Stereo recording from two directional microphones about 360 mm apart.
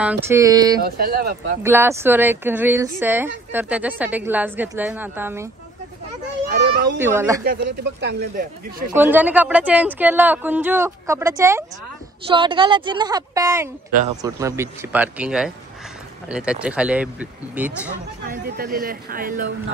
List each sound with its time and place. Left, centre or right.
0.0 s a woman's voice: centre
0.7 s speech: right
1.6 s speech: centre
6.5 s children playing: right
7.0 s a woman's voice: centre
7.4 s speech: right
8.9 s a woman's voice: centre
18.3 s speech: right